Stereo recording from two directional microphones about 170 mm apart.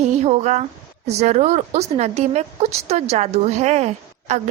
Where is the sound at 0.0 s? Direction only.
40° right (ahead or behind).